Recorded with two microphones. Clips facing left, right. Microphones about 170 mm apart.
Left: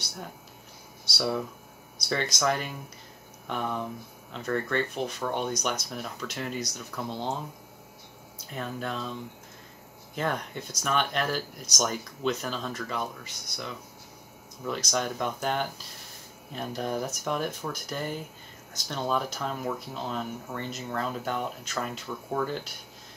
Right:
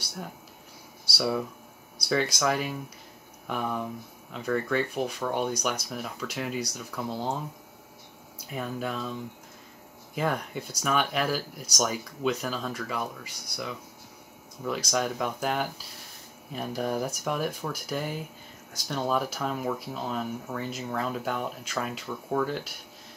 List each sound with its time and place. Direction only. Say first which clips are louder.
1.1 s speech: right 1 dB; 5° right (ahead or behind)
8.5 s speech: right 2 dB; 5° right (ahead or behind)
10.1 s speech: right 2 dB; 5° right (ahead or behind)